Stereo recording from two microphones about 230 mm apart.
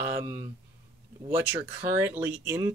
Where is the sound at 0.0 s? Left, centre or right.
Centre.